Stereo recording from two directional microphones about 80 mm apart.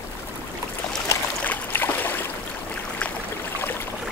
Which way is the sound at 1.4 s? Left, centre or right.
Left.